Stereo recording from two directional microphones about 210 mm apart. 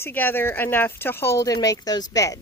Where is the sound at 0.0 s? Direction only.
10° left (ahead or behind).